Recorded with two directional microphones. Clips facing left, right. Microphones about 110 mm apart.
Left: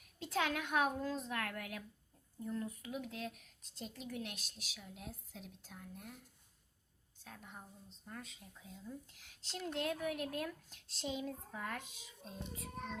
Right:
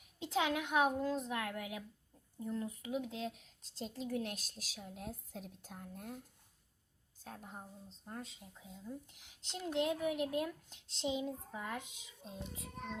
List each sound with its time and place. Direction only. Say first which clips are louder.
0.2 s a woman's voice: right 2 dB; 20° right (ahead or behind); by 6.1 s 40° right (ahead or behind)
7.3 s speech: right 4 dB; 40° right (ahead or behind)
8.5 s a woman's voice: right 2 dB; 20° right (ahead or behind)